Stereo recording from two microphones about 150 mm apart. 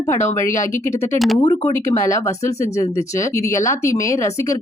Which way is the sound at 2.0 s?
20° left (ahead or behind).